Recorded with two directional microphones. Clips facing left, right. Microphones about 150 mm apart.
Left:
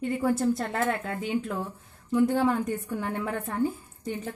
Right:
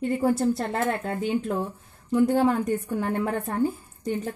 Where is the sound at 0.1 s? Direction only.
35° right (ahead or behind).